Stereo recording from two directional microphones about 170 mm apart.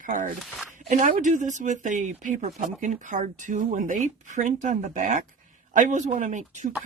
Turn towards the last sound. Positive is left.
turn(degrees=-45)  # may be behind; listen again after turning